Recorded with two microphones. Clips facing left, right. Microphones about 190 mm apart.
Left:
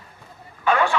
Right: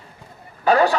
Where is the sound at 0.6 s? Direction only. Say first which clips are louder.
Right 4 dB; 35° right (ahead or behind).